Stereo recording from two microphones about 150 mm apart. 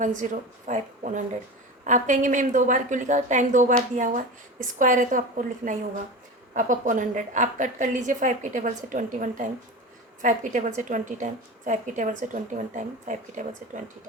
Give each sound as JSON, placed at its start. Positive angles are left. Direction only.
{"t": 0.0, "sound": "a woman's voice", "side_deg": -55}
{"t": 6.5, "sound": "a woman's voice", "side_deg": -60}